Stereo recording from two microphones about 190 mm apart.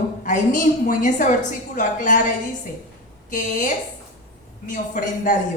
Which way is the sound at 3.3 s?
40° left (ahead or behind).